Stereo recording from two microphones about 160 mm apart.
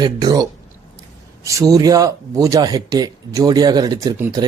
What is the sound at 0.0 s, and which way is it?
Speech, 25° right (ahead or behind).